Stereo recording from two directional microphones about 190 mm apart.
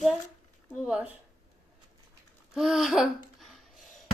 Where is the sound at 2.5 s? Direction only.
Centre (ahead or behind).